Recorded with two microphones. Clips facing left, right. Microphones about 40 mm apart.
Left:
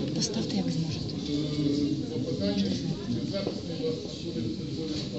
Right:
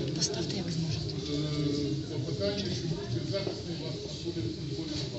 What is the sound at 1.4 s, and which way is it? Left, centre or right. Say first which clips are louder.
Speech: left 4 dB; centre.